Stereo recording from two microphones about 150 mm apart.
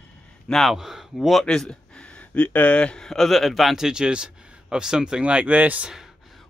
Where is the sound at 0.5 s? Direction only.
Centre (ahead or behind).